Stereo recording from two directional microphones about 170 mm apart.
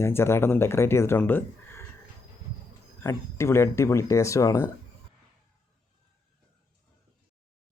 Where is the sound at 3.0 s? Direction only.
15° left (ahead or behind).